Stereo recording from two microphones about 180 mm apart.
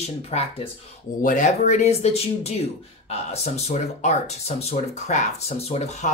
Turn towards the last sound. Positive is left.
turn(degrees=40)  # may be behind; listen again after turning